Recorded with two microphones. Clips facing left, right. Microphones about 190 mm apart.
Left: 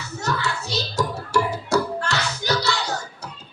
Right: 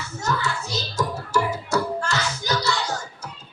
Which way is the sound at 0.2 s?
65° left (ahead or behind).